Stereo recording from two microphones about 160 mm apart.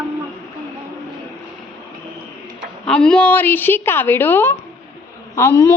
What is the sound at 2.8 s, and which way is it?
A woman's voice, 5° left (ahead or behind).